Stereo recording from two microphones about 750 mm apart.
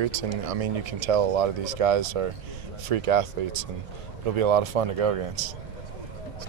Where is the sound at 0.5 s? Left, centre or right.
Right.